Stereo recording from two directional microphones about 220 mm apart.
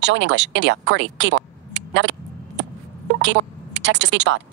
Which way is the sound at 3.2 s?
55° right (ahead or behind).